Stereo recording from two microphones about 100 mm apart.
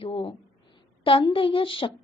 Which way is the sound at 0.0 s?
65° left (ahead or behind).